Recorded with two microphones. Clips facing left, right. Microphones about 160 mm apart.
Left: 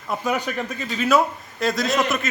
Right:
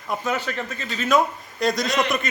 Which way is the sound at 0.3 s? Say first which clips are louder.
Left 3 dB; 10° left (ahead or behind).